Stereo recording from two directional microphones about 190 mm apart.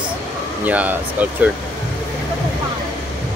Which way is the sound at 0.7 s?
10° right (ahead or behind).